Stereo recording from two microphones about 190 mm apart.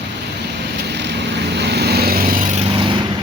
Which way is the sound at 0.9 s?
65° right (ahead or behind).